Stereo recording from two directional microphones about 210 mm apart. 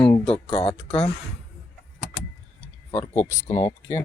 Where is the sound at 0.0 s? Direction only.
25° left (ahead or behind).